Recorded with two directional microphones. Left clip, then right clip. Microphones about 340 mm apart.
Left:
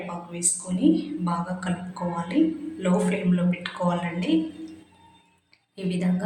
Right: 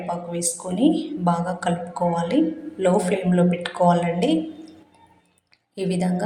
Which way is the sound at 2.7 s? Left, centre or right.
Centre.